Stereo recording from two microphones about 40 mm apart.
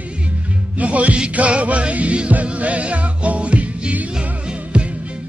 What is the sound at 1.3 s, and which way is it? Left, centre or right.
Music, right.